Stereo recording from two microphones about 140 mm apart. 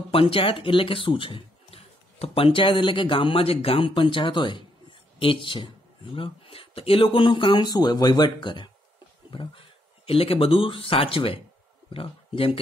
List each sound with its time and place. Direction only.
0.1 s speech: 40° left (ahead or behind)